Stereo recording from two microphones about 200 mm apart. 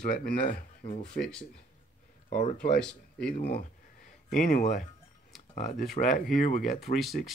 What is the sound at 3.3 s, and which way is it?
Speech, 50° left (ahead or behind).